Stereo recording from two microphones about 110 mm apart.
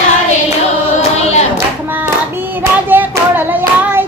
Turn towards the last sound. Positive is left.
turn(degrees=-20)  # may be behind; listen again after turning